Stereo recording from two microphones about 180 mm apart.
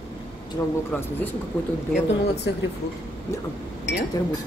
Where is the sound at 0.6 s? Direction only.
15° left (ahead or behind).